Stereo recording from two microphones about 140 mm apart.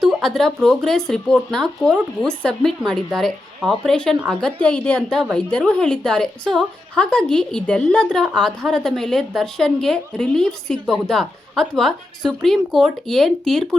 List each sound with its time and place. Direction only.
0.0 s a woman's voice: centre (ahead or behind)